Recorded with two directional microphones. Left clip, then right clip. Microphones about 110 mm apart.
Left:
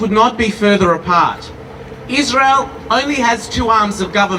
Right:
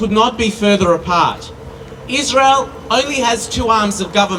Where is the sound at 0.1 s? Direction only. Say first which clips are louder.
Left 2 dB; 25° left (ahead or behind).